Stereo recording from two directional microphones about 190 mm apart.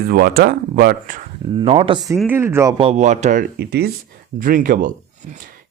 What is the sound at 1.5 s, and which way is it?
Speech, 30° right (ahead or behind).